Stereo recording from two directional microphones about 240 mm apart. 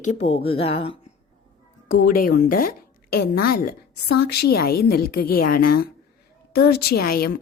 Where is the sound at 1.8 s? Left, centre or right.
Left.